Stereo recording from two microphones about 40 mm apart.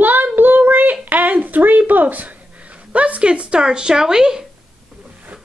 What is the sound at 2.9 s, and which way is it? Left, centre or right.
Speech, right.